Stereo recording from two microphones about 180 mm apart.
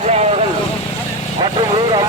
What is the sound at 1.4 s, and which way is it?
Vehicle, 25° right (ahead or behind).